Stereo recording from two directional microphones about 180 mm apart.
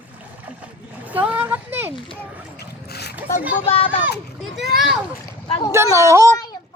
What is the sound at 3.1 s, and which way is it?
Speech, 10° right (ahead or behind).